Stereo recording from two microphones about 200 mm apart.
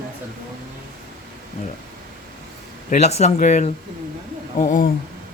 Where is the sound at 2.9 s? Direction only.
35° left (ahead or behind).